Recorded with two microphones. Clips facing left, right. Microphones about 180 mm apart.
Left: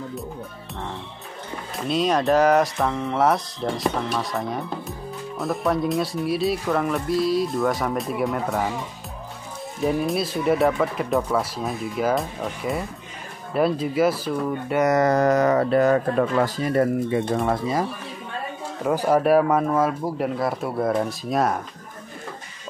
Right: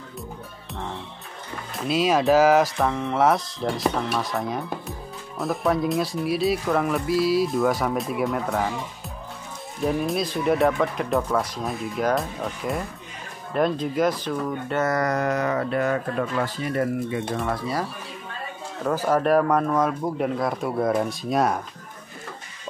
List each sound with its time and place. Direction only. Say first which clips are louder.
1.8 s speech: even; 5° right (ahead or behind)
9.8 s speech: left 1 dB; centre (ahead or behind); by 15.1 s 20° left (ahead or behind)
15.1 s speech: left 6 dB; 40° left (ahead or behind)
17.5 s speech: left 4 dB; 20° left (ahead or behind)
18.9 s speech: left 2 dB; 10° left (ahead or behind)